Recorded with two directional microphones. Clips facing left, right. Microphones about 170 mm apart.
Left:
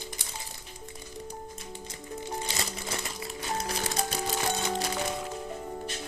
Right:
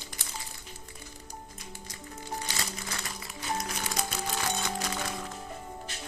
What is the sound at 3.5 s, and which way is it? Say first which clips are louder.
Music: left 4 dB; 35° left (ahead or behind).